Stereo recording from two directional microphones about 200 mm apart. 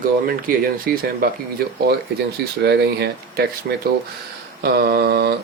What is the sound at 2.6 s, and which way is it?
Speech, 55° right (ahead or behind).